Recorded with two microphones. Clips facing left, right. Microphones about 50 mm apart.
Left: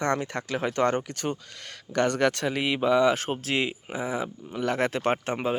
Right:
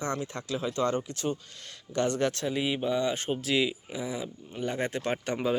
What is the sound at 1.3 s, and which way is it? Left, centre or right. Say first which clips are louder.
Speech: left 1 dB; left.